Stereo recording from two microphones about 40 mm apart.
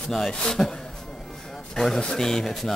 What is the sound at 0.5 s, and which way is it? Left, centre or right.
Speech, centre.